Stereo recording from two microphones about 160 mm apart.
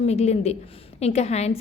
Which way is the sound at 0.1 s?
40° left (ahead or behind).